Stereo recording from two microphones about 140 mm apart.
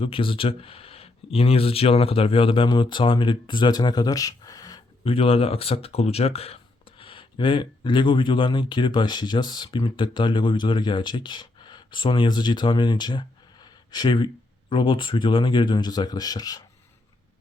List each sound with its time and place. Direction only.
0.0 s speech: 40° left (ahead or behind)
5.0 s speech: 40° left (ahead or behind)